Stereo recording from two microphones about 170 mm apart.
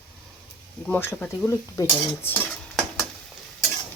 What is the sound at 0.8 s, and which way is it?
Speech, 10° left (ahead or behind).